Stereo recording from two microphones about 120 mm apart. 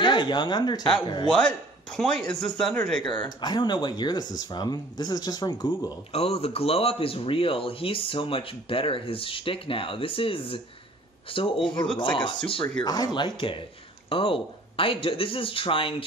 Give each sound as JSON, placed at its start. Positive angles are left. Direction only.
{"t": 0.0, "sound": "speech", "side_deg": 40}
{"t": 1.4, "sound": "speech", "side_deg": 5}
{"t": 3.0, "sound": "speech", "side_deg": 45}
{"t": 6.1, "sound": "speech", "side_deg": 55}